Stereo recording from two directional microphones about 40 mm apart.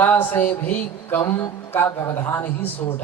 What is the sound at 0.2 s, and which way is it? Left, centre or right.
A man's voice, left.